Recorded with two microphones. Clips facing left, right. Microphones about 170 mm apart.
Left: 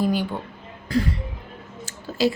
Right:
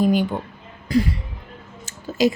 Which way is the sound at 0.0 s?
15° right (ahead or behind).